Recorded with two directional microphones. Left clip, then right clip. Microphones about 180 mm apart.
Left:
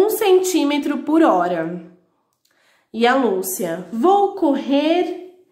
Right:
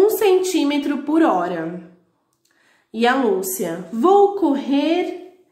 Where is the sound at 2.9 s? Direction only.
20° left (ahead or behind).